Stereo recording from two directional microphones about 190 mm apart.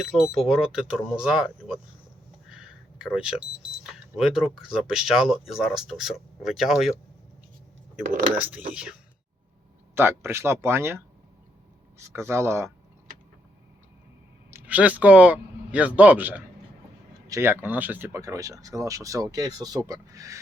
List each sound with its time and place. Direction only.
0.0 s speech: centre (ahead or behind)
2.5 s a sound: 5° right (ahead or behind)
3.8 s speech: 5° right (ahead or behind)
14.5 s speech: 10° right (ahead or behind)